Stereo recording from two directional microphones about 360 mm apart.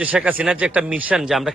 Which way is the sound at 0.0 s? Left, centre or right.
Centre.